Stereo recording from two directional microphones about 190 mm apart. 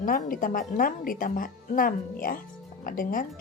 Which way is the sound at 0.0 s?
45° left (ahead or behind).